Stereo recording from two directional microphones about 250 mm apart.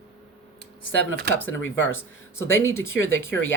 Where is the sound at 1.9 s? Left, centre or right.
Centre.